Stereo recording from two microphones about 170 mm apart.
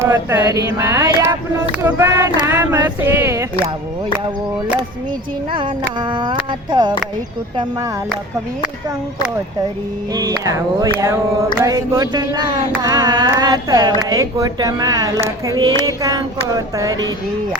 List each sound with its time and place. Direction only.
0.0 s speech: 15° right (ahead or behind)
2.5 s a sound: 15° right (ahead or behind)
5.5 s carnatic music: 30° right (ahead or behind)
10.2 s carnatic music: 20° right (ahead or behind)